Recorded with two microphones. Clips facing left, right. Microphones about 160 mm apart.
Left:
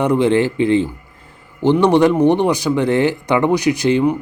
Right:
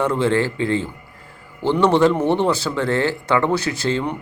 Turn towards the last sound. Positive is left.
turn(degrees=15)  # may be behind; listen again after turning